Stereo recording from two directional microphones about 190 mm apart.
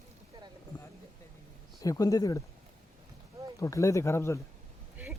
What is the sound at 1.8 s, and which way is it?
Speech, 20° left (ahead or behind).